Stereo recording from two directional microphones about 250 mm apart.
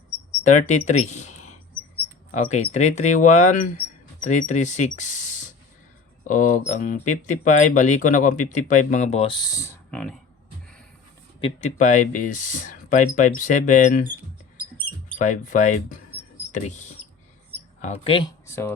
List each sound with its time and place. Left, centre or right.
0.7 s speech: left; by 10.2 s centre
11.3 s speech: left
15.2 s speech: left
18.0 s speech: centre